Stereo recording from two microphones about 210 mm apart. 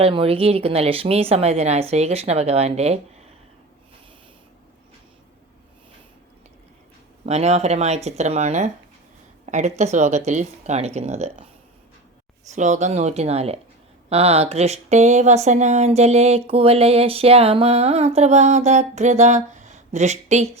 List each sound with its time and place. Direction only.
0.0 s speech: 25° right (ahead or behind)
7.3 s speech: 30° right (ahead or behind)
12.5 s speech: 35° right (ahead or behind)